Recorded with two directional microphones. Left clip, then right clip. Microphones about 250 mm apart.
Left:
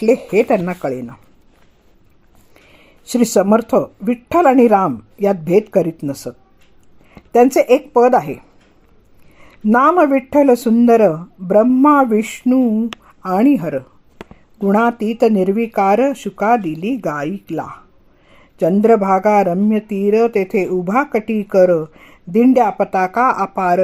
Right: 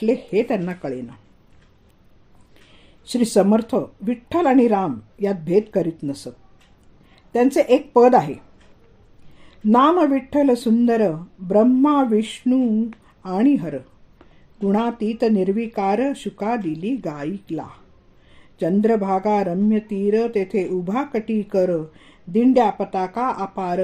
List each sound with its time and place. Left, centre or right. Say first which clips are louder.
0.0 s speech: left 6 dB; left
3.1 s speech: left 4 dB; left
7.3 s speech: left 6 dB; left
9.6 s speech: left 4 dB; left